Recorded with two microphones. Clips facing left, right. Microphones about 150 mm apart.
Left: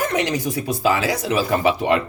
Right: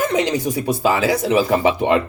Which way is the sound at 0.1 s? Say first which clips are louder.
Right 3 dB; 25° right (ahead or behind).